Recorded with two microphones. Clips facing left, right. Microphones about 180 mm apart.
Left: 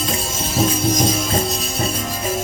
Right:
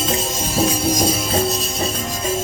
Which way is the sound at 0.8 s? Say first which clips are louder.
Even; 10° right (ahead or behind).